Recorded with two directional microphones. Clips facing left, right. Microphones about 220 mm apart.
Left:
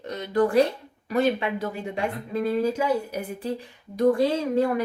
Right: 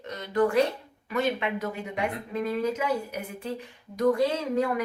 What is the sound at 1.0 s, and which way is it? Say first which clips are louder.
Speech: left 4 dB; 35° left (ahead or behind).